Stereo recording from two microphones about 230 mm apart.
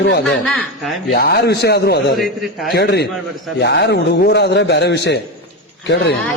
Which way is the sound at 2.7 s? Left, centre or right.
Left.